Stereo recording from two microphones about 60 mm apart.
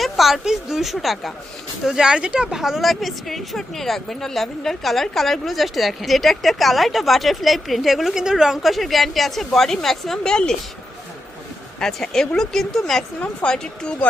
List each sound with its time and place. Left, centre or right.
0.0 s speech: centre
1.8 s speech: centre
11.8 s speech: centre
13.1 s speech: centre